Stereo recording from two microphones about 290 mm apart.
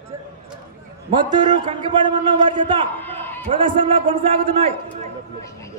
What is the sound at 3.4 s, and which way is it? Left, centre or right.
A man's voice, centre.